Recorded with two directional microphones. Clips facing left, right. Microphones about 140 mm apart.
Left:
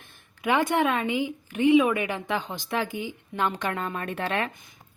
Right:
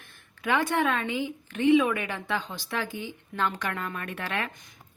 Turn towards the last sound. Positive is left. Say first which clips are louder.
# left 4 dB
turn(degrees=30)  # may be behind; listen again after turning